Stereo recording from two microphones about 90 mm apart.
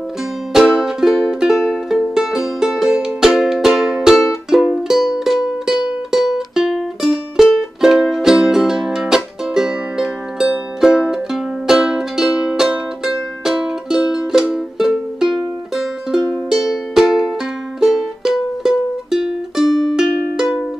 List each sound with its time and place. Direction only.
0.5 s music: 5° right (ahead or behind)